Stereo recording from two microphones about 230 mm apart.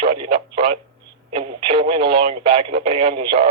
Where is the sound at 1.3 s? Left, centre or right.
Right.